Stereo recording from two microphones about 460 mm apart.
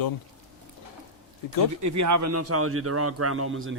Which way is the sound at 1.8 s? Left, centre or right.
Right.